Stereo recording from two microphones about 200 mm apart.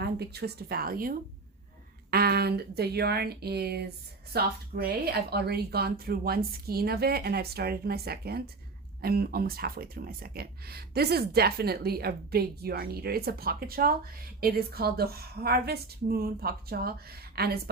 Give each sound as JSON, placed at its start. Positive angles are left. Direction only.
{"t": 0.0, "sound": "speech", "side_deg": -55}